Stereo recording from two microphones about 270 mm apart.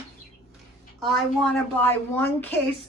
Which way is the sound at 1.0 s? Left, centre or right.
Centre.